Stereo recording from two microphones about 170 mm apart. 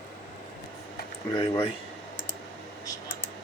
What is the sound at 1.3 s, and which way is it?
Speech, 35° left (ahead or behind).